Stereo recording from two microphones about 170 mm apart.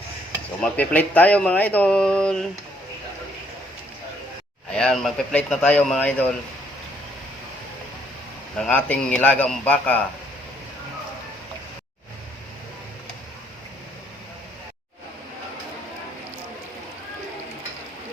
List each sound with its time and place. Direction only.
0.6 s speech: 10° left (ahead or behind)
4.7 s speech: 5° left (ahead or behind)
8.5 s speech: 5° left (ahead or behind)